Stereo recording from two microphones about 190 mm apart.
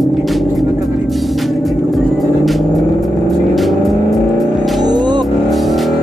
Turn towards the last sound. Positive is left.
turn(degrees=0)  # may be behind; listen again after turning